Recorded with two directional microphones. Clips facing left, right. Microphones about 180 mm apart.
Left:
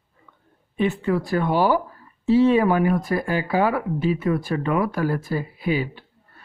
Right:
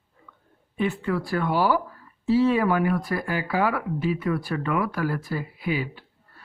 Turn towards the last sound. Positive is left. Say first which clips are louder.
# left 4 dB
turn(degrees=25)  # may be behind; listen again after turning